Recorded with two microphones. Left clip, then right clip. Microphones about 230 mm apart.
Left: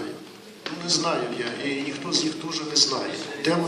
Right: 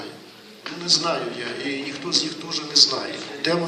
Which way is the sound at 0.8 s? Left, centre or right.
Right.